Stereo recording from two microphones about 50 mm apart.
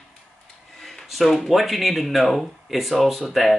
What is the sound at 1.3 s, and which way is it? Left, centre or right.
Speech, centre.